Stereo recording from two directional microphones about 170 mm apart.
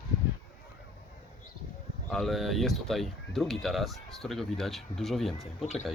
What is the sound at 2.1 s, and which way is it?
Speech, centre (ahead or behind).